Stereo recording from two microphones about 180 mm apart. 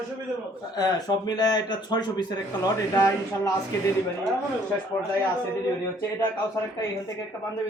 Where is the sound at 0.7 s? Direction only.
20° left (ahead or behind).